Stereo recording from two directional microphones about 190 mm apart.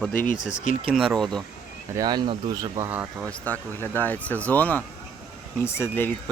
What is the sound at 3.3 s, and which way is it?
Speech, 10° left (ahead or behind).